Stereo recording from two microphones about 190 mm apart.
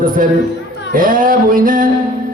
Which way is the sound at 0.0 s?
45° right (ahead or behind).